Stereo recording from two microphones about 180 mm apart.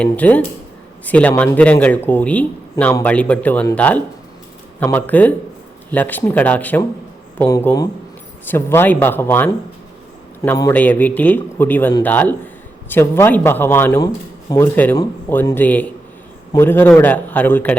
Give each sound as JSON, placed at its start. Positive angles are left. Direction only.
{"t": 0.0, "sound": "speech", "side_deg": 10}